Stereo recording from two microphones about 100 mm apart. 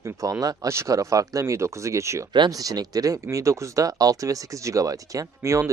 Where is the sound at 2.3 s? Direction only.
45° right (ahead or behind).